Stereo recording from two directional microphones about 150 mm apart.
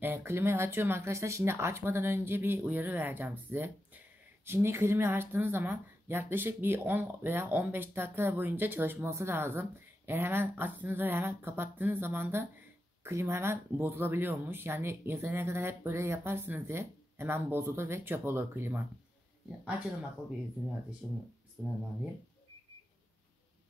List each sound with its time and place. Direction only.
0.0 s speech: 15° right (ahead or behind)
20.6 s speech: centre (ahead or behind)